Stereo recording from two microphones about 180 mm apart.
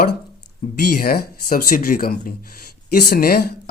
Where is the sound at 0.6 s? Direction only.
50° left (ahead or behind).